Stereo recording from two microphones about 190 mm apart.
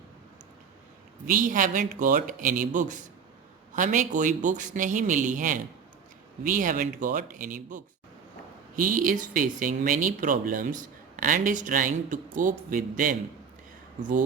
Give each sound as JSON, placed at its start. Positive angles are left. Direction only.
{"t": 1.3, "sound": "a man's voice", "side_deg": -45}